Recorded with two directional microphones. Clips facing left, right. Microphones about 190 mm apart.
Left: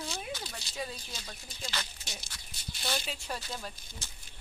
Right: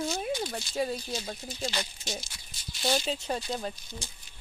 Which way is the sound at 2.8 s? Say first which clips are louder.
Right 8 dB; 30° right (ahead or behind).